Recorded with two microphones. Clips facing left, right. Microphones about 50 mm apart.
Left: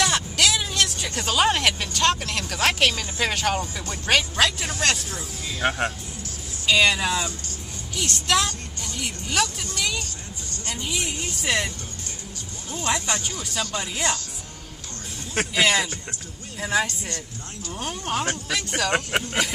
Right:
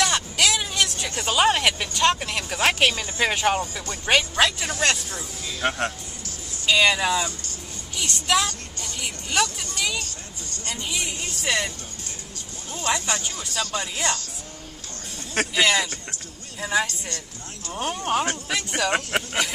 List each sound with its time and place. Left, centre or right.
0.0 s vehicle: centre
1.2 s speech: centre
3.7 s speech: centre
4.0 s speech: centre
5.6 s speech: centre
6.6 s speech: centre
8.9 s vehicle: centre
10.6 s speech: centre
12.7 s speech: centre
15.3 s speech: centre
17.7 s speech: right
18.0 s speech: centre